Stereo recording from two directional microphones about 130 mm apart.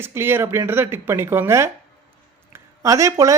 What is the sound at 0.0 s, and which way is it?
Speech, 20° right (ahead or behind).